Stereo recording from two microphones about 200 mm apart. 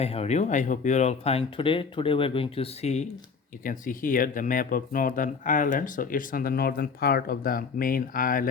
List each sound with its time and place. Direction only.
0.0 s speech: 30° left (ahead or behind)